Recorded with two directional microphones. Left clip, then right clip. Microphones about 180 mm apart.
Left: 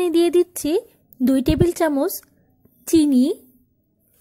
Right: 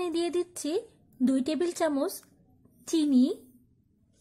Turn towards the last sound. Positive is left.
turn(degrees=30)  # may be behind; listen again after turning